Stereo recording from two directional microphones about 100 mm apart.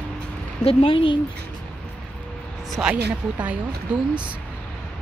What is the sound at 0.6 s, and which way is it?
Speech, 75° left (ahead or behind).